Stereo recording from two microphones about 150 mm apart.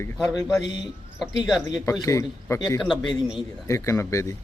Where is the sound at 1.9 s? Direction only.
20° left (ahead or behind).